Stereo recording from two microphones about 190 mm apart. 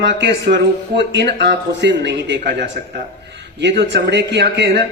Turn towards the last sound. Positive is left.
turn(degrees=-65)  # may be behind; listen again after turning